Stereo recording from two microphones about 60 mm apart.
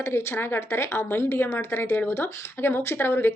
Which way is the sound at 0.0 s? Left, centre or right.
Left.